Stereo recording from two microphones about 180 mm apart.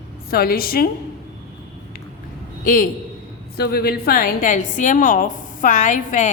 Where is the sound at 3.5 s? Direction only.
60° left (ahead or behind); by 6.2 s 45° left (ahead or behind).